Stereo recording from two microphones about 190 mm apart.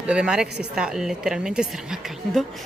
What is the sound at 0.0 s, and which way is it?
A woman's voice, 5° right (ahead or behind).